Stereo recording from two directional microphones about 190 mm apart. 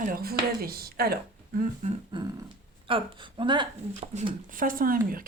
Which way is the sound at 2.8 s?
25° right (ahead or behind).